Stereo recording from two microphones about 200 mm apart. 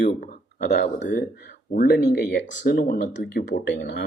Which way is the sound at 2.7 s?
45° left (ahead or behind).